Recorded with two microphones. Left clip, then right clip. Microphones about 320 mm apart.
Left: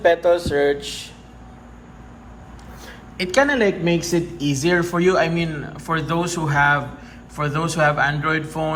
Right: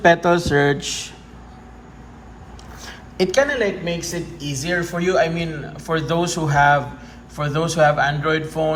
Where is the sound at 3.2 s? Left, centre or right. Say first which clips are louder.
Even; centre.